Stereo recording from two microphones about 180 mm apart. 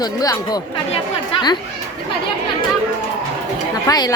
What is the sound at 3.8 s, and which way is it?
Speech, 20° left (ahead or behind).